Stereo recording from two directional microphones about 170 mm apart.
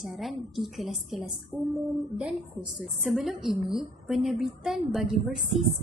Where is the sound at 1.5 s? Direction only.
20° right (ahead or behind).